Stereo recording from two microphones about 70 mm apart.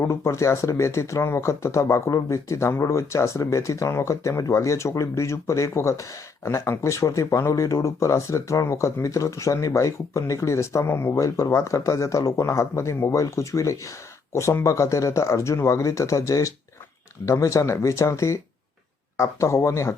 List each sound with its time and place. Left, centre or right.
0.0 s speech: left